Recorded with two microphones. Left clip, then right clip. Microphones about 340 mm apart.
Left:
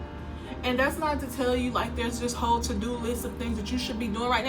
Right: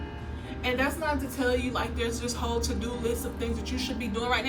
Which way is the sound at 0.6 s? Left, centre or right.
Centre.